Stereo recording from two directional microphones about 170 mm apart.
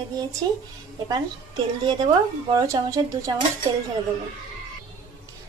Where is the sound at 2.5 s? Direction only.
20° right (ahead or behind).